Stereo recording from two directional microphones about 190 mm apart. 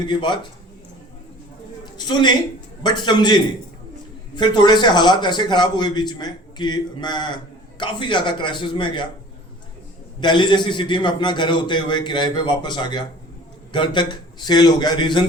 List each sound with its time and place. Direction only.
0.0 s a man's voice: 25° left (ahead or behind)
1.8 s a man's voice: 25° left (ahead or behind)
10.2 s a man's voice: 25° left (ahead or behind)